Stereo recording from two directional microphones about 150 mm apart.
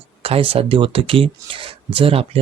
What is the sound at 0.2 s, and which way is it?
Speech, 40° right (ahead or behind).